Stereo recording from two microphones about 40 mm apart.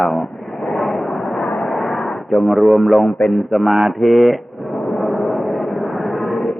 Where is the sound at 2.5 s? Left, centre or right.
Centre.